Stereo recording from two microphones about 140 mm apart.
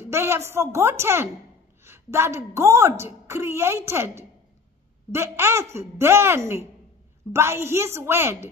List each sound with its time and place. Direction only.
0.0 s a woman's voice: 20° right (ahead or behind)